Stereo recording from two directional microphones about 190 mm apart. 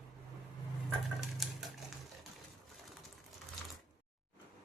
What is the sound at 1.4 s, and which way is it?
Typewriter, centre (ahead or behind).